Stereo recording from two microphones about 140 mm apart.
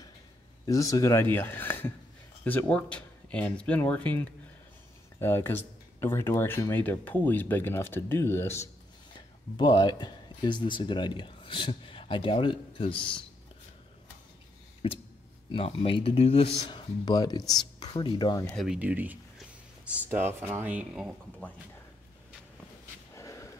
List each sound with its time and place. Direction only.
0.7 s speech: 25° left (ahead or behind)
9.6 s speech: 30° left (ahead or behind)
14.8 s speech: 40° left (ahead or behind)
18.6 s speech: 5° right (ahead or behind)
23.1 s snort: 20° left (ahead or behind)